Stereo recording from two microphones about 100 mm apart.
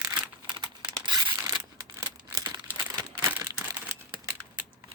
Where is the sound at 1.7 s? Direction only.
40° right (ahead or behind).